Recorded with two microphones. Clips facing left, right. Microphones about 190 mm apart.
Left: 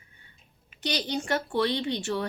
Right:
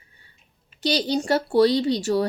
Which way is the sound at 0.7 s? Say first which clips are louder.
Right 7 dB; 35° right (ahead or behind).